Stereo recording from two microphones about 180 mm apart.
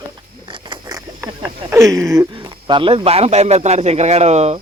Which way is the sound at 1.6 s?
15° right (ahead or behind).